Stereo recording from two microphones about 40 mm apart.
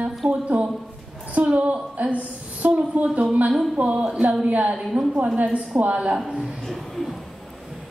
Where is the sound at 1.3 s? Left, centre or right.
Right.